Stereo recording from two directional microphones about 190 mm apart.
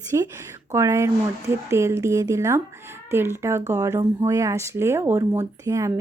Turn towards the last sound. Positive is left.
turn(degrees=-15)  # may be behind; listen again after turning